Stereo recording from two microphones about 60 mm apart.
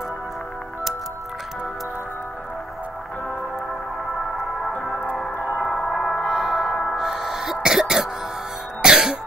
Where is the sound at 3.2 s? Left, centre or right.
Left.